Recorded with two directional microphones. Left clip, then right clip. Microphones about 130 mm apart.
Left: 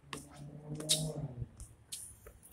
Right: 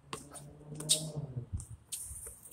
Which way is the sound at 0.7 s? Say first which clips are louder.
Right 1 dB; 15° right (ahead or behind).